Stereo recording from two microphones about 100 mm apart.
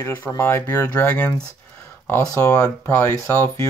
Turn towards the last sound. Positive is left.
turn(degrees=25)  # may be behind; listen again after turning